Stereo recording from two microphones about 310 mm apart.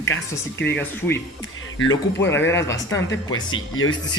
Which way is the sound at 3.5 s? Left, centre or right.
Left.